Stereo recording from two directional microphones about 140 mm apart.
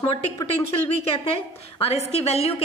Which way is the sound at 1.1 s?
45° left (ahead or behind).